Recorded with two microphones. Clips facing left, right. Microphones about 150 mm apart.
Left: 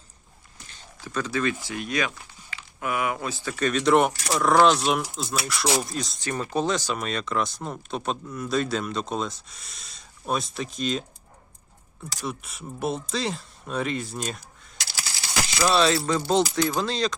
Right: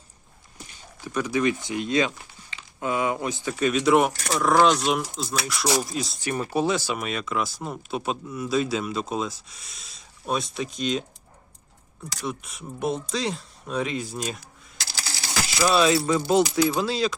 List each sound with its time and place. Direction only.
0.7 s speech: 15° right (ahead or behind)
12.2 s speech: centre (ahead or behind)
15.6 s speech: 10° right (ahead or behind)